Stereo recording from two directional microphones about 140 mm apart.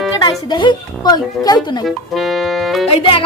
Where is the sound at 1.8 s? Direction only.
Centre (ahead or behind).